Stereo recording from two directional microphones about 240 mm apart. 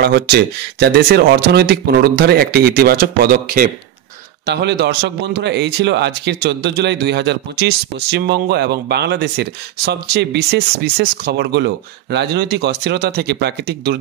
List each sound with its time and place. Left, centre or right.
0.0 s a man's voice: right